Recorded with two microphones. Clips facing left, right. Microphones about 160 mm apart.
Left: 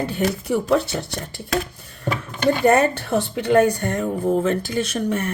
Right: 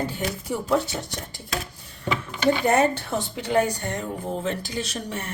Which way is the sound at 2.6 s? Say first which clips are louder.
Left 4 dB; 60° left (ahead or behind).